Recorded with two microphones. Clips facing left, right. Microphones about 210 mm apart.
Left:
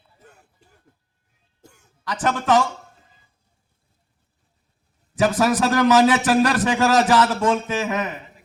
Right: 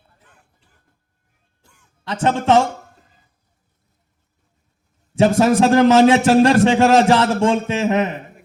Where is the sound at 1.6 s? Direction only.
40° left (ahead or behind).